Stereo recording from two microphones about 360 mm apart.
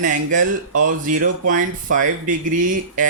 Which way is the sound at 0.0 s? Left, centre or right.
Right.